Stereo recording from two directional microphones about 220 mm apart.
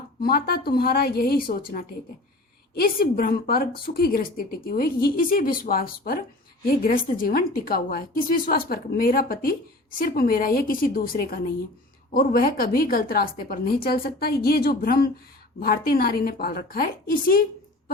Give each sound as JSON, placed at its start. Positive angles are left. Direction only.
{"t": 0.2, "sound": "a woman's voice", "side_deg": 45}